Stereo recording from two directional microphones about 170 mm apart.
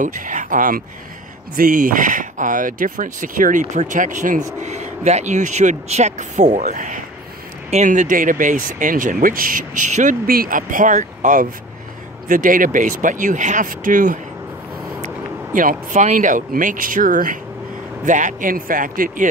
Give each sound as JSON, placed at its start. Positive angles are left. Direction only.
{"t": 0.0, "sound": "speech", "side_deg": -50}
{"t": 15.5, "sound": "speech", "side_deg": -50}